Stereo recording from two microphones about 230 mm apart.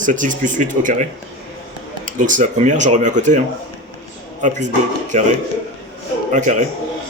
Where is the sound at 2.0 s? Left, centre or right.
Right.